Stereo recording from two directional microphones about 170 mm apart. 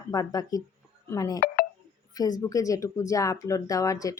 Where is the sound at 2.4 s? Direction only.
20° left (ahead or behind).